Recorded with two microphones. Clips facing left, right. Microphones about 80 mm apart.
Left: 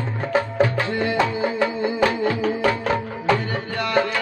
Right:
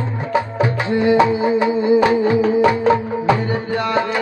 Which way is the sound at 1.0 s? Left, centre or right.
Centre.